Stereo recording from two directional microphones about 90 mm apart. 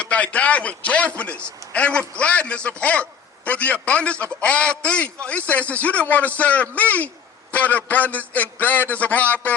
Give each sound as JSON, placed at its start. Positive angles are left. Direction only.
{"t": 0.0, "sound": "a man's voice", "side_deg": 15}